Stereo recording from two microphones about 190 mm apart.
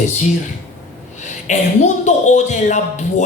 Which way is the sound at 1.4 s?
40° left (ahead or behind).